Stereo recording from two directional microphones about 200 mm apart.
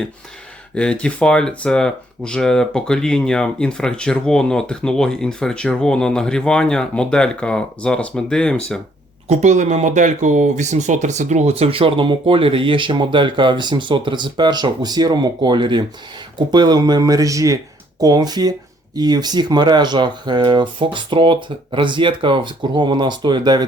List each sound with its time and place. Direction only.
0.7 s speech: 5° left (ahead or behind)
9.3 s speech: 35° right (ahead or behind)